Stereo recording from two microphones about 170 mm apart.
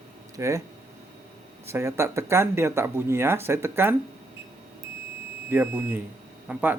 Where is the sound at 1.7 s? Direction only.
15° right (ahead or behind).